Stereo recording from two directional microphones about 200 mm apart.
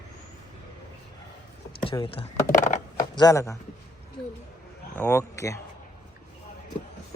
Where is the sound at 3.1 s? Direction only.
15° left (ahead or behind).